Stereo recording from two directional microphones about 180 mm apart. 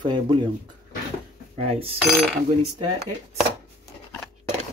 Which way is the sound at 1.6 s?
35° right (ahead or behind).